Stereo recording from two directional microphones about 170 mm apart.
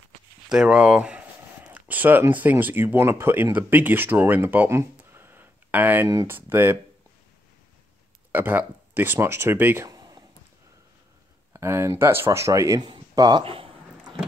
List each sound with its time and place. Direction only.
0.5 s speech: 5° right (ahead or behind)
8.3 s speech: 10° right (ahead or behind)
11.5 s speech: 15° right (ahead or behind); by 13.7 s 35° right (ahead or behind)